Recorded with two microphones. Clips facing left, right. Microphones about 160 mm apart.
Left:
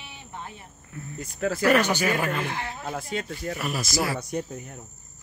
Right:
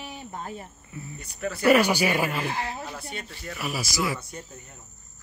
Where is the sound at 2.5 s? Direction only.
35° right (ahead or behind).